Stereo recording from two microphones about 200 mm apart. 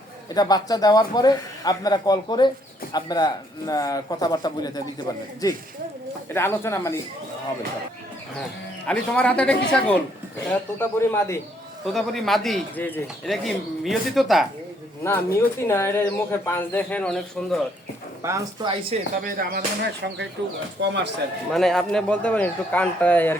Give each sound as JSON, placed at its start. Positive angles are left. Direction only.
{"t": 0.3, "sound": "speech", "side_deg": 20}
{"t": 6.3, "sound": "speech", "side_deg": 10}
{"t": 8.9, "sound": "speech", "side_deg": 5}
{"t": 15.0, "sound": "speech", "side_deg": 15}
{"t": 18.2, "sound": "speech", "side_deg": -15}
{"t": 19.2, "sound": "speech", "side_deg": -50}
{"t": 20.8, "sound": "speech", "side_deg": -60}
{"t": 21.5, "sound": "speech", "side_deg": 0}